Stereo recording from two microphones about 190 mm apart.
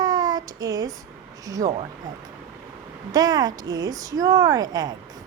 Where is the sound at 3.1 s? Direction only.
20° right (ahead or behind).